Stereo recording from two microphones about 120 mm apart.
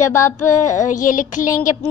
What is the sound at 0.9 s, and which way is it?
Child singing, 90° left.